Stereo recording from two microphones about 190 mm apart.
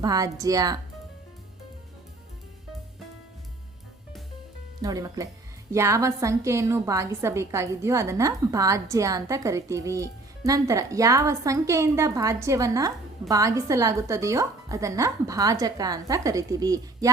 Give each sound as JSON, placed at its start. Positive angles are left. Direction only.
{"t": 0.0, "sound": "speech", "side_deg": -20}
{"t": 4.8, "sound": "a woman's voice", "side_deg": -20}